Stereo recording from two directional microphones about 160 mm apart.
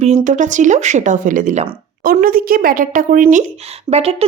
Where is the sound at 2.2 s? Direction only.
65° right (ahead or behind).